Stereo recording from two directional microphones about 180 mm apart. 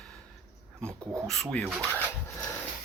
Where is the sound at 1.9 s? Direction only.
10° right (ahead or behind).